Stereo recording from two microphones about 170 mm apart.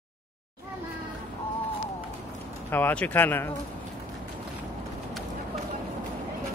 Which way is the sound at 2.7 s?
10° left (ahead or behind).